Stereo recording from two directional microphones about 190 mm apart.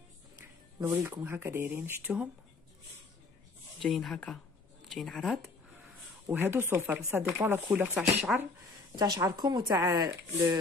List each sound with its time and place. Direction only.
0.7 s speech: 15° right (ahead or behind)
3.8 s speech: centre (ahead or behind)
6.2 s speech: 10° right (ahead or behind)
8.9 s speech: 20° right (ahead or behind)